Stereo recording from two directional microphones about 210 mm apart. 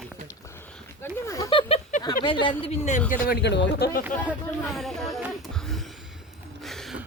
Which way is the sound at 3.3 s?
50° left (ahead or behind).